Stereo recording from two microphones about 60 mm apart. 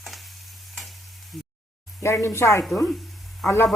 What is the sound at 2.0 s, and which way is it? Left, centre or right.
Speech, left.